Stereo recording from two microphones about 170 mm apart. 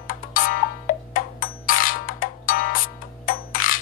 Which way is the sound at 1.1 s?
55° left (ahead or behind).